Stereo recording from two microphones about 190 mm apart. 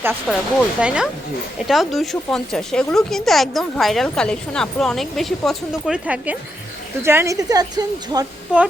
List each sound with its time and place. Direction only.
0.3 s a woman's voice: centre (ahead or behind); by 8.3 s 20° right (ahead or behind)
8.5 s a woman's voice: 5° right (ahead or behind)